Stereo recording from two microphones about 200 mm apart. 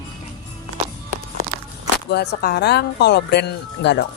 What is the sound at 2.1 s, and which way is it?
Speech, 55° left (ahead or behind).